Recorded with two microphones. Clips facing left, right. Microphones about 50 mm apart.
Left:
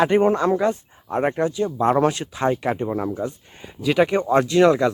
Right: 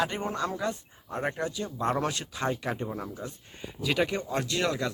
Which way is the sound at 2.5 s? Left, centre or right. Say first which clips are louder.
Left 10 dB; left.